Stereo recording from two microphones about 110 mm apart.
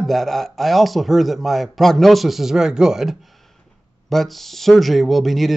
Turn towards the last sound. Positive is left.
turn(degrees=0)  # may be behind; listen again after turning